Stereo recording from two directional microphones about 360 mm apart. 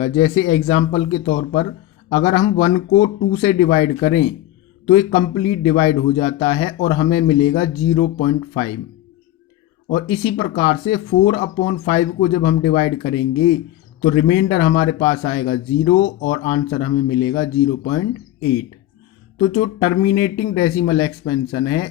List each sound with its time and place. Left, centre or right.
0.0 s a man's voice: centre
9.9 s a man's voice: centre
19.4 s a man's voice: left